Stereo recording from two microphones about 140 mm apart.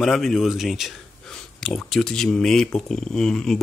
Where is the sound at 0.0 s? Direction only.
Centre (ahead or behind).